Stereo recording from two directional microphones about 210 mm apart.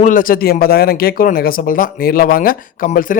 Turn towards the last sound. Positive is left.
turn(degrees=40)  # may be behind; listen again after turning